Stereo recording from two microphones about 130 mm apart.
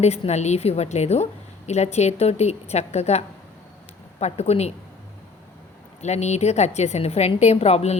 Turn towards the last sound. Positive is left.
turn(degrees=55)  # may be behind; listen again after turning